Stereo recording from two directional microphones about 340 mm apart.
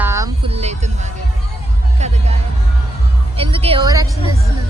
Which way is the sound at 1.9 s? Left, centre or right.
Centre.